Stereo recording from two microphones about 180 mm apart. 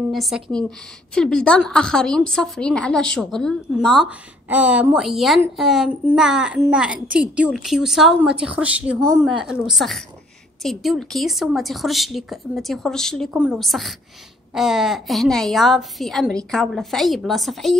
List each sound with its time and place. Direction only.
0.1 s a woman's voice: centre (ahead or behind)